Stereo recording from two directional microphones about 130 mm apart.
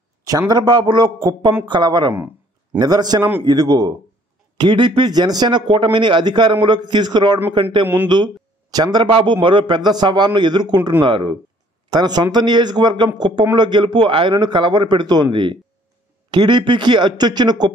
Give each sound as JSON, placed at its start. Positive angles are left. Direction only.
{"t": 0.3, "sound": "speech", "side_deg": -30}
{"t": 2.1, "sound": "a sound", "side_deg": -15}
{"t": 2.8, "sound": "speech", "side_deg": -30}
{"t": 7.8, "sound": "speech", "side_deg": -15}
{"t": 8.7, "sound": "speech", "side_deg": -30}